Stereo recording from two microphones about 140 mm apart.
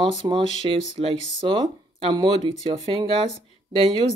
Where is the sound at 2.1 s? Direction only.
30° right (ahead or behind).